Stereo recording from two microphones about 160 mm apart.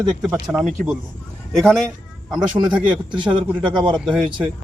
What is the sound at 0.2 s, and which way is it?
Speech, 5° right (ahead or behind).